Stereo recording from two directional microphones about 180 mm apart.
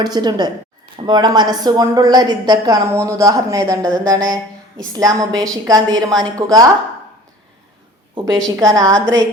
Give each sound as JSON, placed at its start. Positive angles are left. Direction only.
{"t": 0.0, "sound": "a woman's voice", "side_deg": -25}
{"t": 8.1, "sound": "a woman's voice", "side_deg": -25}